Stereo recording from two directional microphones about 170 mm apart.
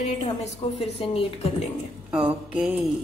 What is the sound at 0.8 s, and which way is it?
Speech, 35° left (ahead or behind).